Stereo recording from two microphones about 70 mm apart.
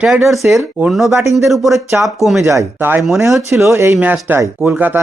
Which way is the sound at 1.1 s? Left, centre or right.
Right.